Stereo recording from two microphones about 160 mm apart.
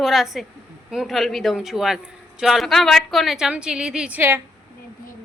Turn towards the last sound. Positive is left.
turn(degrees=-15)  # may be behind; listen again after turning